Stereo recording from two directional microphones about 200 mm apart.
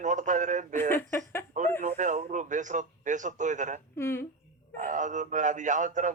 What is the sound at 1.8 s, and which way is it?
Speech, 40° right (ahead or behind).